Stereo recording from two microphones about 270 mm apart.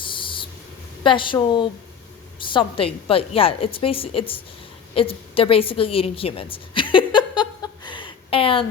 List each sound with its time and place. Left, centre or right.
0.0 s owl: centre
1.0 s a woman's voice: centre